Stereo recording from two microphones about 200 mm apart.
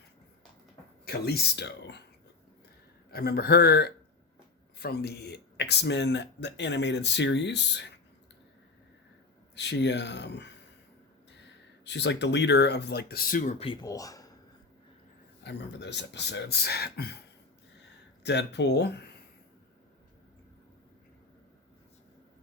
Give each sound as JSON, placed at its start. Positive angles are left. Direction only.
{"t": 1.0, "sound": "speech", "side_deg": 50}
{"t": 3.1, "sound": "speech", "side_deg": 50}
{"t": 9.6, "sound": "speech", "side_deg": 60}
{"t": 13.8, "sound": "speech", "side_deg": 15}
{"t": 15.4, "sound": "speech", "side_deg": 60}